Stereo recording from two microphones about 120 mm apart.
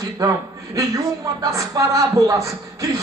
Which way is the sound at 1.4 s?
30° right (ahead or behind).